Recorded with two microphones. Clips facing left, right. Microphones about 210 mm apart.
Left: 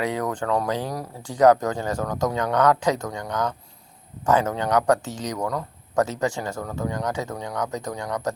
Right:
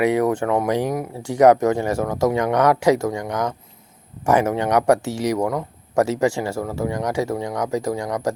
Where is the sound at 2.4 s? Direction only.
10° right (ahead or behind).